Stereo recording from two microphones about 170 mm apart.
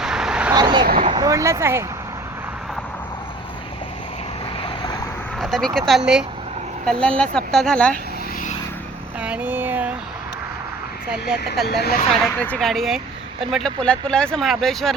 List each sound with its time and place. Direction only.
0.0 s vehicle: 5° right (ahead or behind)
0.5 s speech: 25° right (ahead or behind)
4.6 s vehicle: 25° left (ahead or behind)
5.4 s speech: centre (ahead or behind)
9.2 s speech: 10° right (ahead or behind)
11.6 s speech: 70° left (ahead or behind)
12.1 s speech: 5° left (ahead or behind)